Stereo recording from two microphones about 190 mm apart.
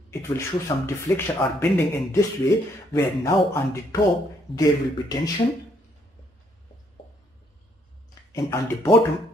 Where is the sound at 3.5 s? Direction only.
15° left (ahead or behind).